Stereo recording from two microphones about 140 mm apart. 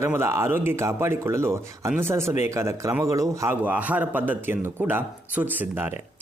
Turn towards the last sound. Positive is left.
turn(degrees=-15)  # may be behind; listen again after turning